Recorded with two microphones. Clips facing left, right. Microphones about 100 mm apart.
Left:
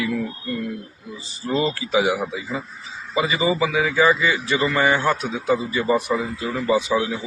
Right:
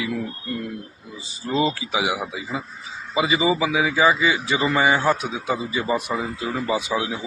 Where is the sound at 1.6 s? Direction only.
15° right (ahead or behind).